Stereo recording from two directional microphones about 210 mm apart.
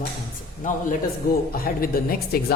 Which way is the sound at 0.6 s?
40° left (ahead or behind).